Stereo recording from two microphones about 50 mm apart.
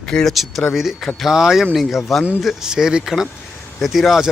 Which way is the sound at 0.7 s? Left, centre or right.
Centre.